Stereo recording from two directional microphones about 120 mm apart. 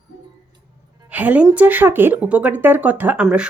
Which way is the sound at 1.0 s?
10° right (ahead or behind).